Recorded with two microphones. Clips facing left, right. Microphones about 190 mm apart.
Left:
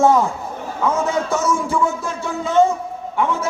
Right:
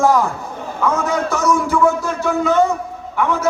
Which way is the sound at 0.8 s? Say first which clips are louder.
Right 1 dB; 25° left (ahead or behind).